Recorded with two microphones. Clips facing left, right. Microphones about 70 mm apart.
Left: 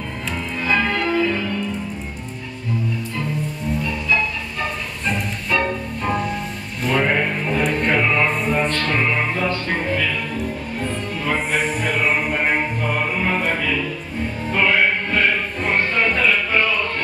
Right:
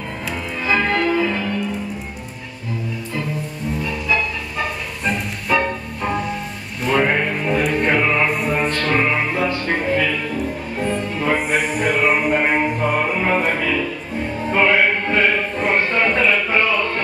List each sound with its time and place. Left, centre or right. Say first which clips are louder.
0.7 s music: right 2 dB; centre
5.0 s music: right 2 dB; centre
10.8 s music: right 6 dB; centre